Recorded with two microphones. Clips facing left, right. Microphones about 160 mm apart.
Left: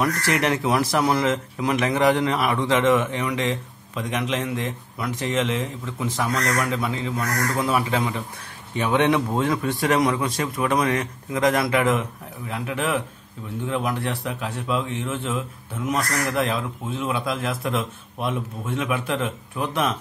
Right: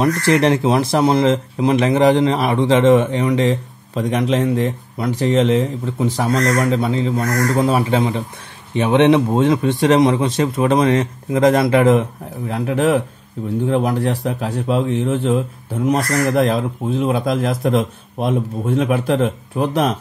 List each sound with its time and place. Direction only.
0.0 s speech: 30° right (ahead or behind)